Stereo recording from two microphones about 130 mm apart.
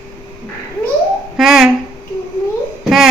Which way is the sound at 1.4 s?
Centre (ahead or behind).